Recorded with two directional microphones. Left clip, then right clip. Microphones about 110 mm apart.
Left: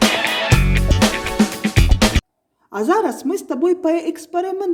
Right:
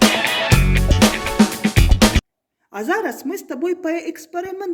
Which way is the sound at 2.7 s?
45° left (ahead or behind).